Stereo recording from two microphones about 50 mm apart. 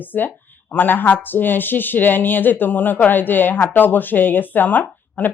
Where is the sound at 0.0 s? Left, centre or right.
Left.